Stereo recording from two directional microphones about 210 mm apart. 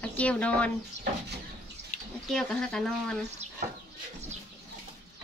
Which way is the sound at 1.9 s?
35° left (ahead or behind).